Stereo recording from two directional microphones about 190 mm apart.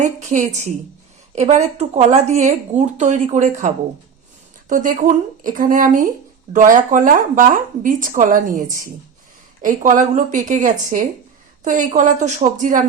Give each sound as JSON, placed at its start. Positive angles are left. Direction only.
{"t": 0.0, "sound": "speech", "side_deg": -40}
{"t": 4.7, "sound": "speech", "side_deg": -45}